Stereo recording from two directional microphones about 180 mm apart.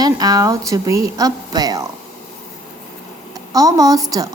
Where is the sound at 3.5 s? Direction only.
20° right (ahead or behind).